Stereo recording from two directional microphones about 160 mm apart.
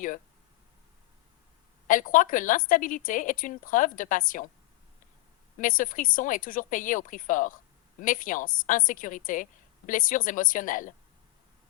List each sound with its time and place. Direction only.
1.9 s a woman's voice: 55° left (ahead or behind)
5.5 s a woman's voice: 55° left (ahead or behind)